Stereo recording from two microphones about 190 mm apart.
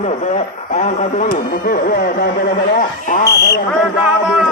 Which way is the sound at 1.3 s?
50° left (ahead or behind).